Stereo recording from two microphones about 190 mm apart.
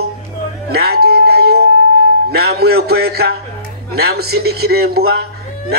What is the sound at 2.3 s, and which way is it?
A man's voice, 55° right (ahead or behind).